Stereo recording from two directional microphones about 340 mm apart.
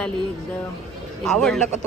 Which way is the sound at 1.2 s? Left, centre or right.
Centre.